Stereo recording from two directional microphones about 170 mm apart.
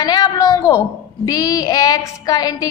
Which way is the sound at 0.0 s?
25° left (ahead or behind).